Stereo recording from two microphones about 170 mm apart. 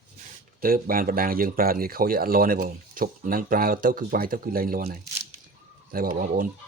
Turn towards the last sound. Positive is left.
turn(degrees=-55)  # may be behind; listen again after turning